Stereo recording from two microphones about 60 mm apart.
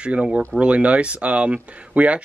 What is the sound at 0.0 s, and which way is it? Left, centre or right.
Speech, centre.